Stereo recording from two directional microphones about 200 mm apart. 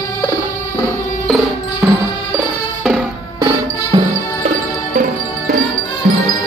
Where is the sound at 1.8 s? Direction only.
5° right (ahead or behind).